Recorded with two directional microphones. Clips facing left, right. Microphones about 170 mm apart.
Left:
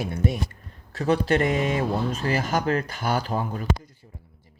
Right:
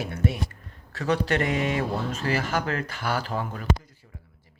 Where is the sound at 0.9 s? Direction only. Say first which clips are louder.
Left 3 dB; 40° left (ahead or behind).